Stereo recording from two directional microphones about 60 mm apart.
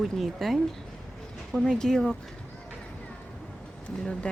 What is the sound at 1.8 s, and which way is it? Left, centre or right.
Speech, centre.